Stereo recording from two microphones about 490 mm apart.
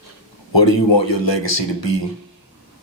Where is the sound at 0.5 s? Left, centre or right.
Left.